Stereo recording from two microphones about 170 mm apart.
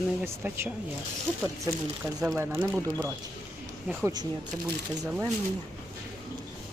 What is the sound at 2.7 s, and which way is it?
Speech, 10° right (ahead or behind).